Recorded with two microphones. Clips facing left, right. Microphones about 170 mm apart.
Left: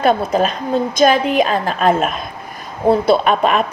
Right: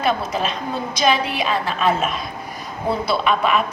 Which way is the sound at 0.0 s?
45° left (ahead or behind).